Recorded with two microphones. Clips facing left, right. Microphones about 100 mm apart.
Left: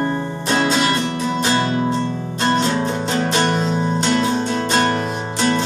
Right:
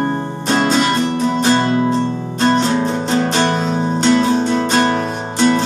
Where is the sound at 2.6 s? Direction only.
30° right (ahead or behind).